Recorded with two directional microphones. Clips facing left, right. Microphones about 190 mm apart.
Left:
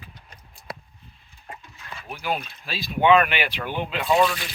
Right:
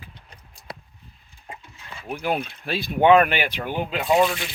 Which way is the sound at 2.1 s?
55° right (ahead or behind).